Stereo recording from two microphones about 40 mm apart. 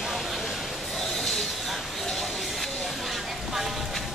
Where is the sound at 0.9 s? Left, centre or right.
Centre.